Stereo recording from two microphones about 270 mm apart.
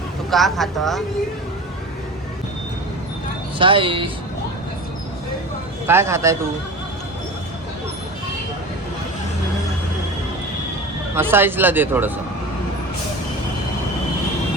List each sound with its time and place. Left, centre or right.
0.3 s speech: centre
3.6 s speech: centre
5.8 s speech: centre
11.1 s speech: centre